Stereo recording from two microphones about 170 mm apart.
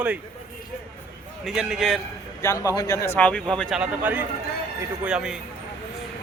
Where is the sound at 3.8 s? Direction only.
10° right (ahead or behind).